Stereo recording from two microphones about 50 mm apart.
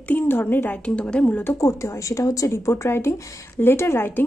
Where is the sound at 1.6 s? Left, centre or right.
Left.